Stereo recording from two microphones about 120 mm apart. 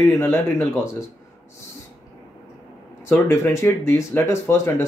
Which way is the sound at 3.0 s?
20° left (ahead or behind).